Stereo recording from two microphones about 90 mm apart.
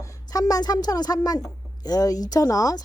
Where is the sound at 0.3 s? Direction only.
45° left (ahead or behind).